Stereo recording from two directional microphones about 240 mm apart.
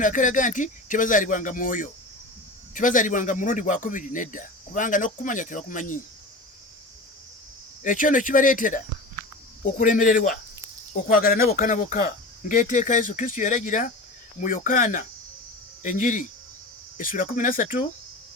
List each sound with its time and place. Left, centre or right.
0.0 s speech: left
7.9 s speech: left